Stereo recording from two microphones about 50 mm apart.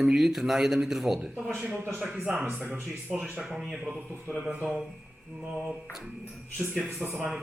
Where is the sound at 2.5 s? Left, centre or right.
Right.